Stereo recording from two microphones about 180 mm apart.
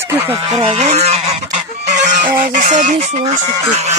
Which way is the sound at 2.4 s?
45° right (ahead or behind).